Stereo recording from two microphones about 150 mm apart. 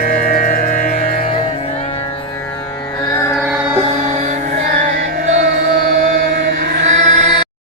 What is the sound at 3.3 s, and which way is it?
Music, centre (ahead or behind).